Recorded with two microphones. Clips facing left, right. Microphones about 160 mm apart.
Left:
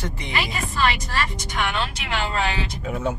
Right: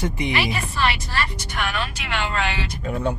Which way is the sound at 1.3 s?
20° left (ahead or behind).